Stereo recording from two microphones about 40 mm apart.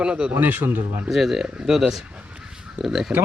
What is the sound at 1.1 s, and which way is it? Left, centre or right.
Speech, centre.